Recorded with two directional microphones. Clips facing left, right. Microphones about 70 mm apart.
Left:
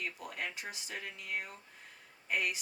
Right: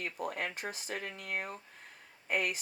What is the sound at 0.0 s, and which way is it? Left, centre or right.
Speech, right.